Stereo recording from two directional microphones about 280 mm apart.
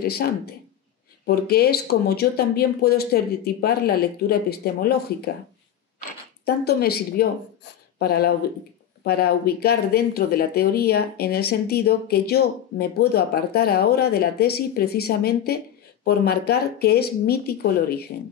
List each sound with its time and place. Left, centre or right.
0.0 s speech: left
6.4 s speech: left